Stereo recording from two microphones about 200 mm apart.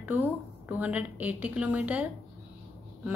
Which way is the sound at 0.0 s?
10° right (ahead or behind).